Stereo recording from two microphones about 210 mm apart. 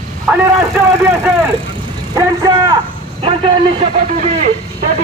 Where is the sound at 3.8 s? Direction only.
30° right (ahead or behind).